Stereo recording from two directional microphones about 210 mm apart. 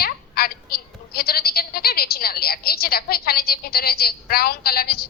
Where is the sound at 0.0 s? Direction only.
45° left (ahead or behind).